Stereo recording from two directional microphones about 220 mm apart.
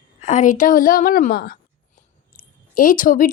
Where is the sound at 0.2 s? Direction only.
35° left (ahead or behind).